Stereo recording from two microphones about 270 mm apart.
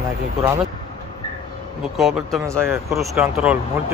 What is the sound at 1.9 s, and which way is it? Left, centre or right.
Speech, centre.